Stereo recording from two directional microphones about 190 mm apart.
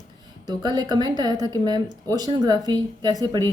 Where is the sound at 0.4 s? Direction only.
20° right (ahead or behind).